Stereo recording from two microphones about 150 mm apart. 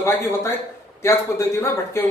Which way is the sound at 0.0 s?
15° left (ahead or behind).